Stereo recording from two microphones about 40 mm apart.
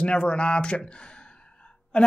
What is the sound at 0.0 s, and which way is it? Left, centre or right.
Speech, left.